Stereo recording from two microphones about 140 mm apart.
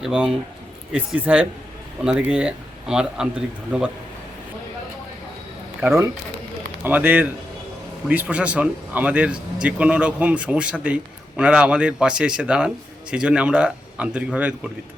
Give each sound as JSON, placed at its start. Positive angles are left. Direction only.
{"t": 0.0, "sound": "a man's voice", "side_deg": -5}
{"t": 5.8, "sound": "a man's voice", "side_deg": -15}